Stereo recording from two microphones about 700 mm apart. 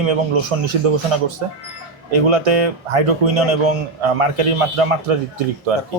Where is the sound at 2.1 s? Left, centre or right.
Right.